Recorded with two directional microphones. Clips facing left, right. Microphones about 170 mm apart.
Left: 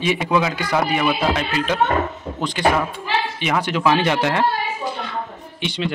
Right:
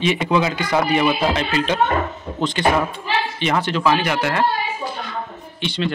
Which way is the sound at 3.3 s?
10° left (ahead or behind).